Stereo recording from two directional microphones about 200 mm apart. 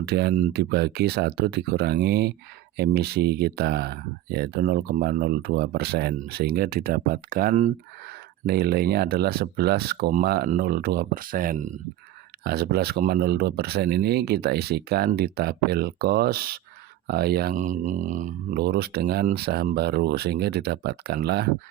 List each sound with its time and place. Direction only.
0.0 s speech: 55° right (ahead or behind)
12.4 s speech: 50° right (ahead or behind)